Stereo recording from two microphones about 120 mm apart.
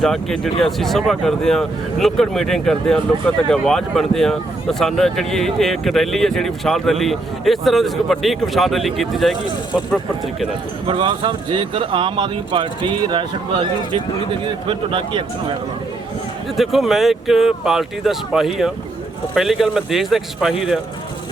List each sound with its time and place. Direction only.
0.0 s speech: 5° left (ahead or behind)
10.8 s speech: 45° right (ahead or behind)
16.6 s speech: centre (ahead or behind)